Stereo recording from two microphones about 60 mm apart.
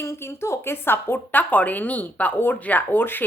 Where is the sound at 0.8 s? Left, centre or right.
Left.